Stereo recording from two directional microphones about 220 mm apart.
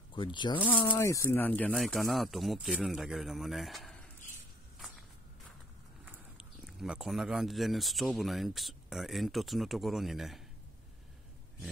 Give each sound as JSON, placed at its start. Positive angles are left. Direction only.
{"t": 0.1, "sound": "speech", "side_deg": 20}
{"t": 6.1, "sound": "speech", "side_deg": -5}